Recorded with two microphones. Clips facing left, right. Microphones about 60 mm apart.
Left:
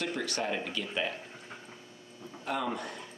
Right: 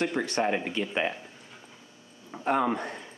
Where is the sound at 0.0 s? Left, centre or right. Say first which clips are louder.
Right 6 dB; right.